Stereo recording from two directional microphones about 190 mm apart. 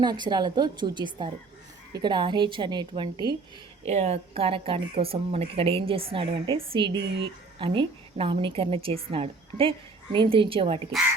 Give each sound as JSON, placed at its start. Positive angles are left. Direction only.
{"t": 0.0, "sound": "a woman's voice", "side_deg": -20}
{"t": 3.8, "sound": "a woman's voice", "side_deg": -35}